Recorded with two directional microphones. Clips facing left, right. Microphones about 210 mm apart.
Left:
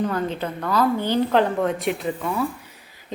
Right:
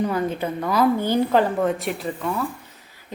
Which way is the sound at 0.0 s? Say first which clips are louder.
Right 1 dB; 10° right (ahead or behind).